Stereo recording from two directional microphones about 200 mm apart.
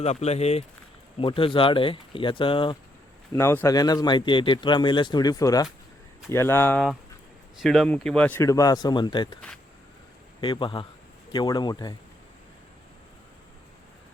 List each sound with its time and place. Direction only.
0.0 s a man's voice: 35° left (ahead or behind)
3.3 s a man's voice: 10° left (ahead or behind)
7.6 s speech: centre (ahead or behind); by 9.4 s 20° left (ahead or behind)
10.4 s a man's voice: 25° left (ahead or behind)